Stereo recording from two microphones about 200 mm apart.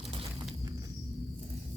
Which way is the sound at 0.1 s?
25° right (ahead or behind).